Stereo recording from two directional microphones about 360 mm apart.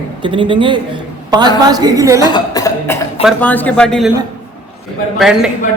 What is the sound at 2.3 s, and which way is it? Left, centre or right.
Speech, centre.